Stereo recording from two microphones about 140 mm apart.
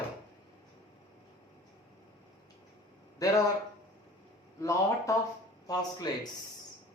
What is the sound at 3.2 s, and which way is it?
Speech, 25° left (ahead or behind).